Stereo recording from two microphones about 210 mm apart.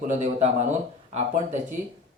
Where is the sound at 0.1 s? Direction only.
30° right (ahead or behind).